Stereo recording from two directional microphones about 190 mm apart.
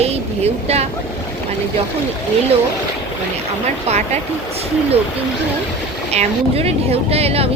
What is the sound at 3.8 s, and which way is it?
Speech, 35° right (ahead or behind).